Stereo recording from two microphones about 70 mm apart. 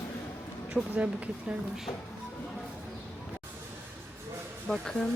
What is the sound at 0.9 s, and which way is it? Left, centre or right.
Speech, centre.